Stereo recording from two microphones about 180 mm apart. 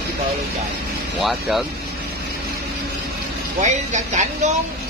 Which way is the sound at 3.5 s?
40° right (ahead or behind).